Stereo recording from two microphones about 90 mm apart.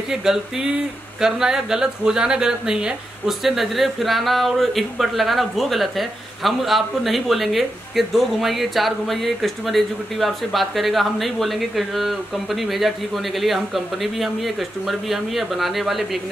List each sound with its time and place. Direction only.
0.1 s speech: 5° right (ahead or behind)